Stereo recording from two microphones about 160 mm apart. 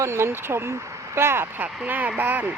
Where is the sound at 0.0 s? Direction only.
15° right (ahead or behind).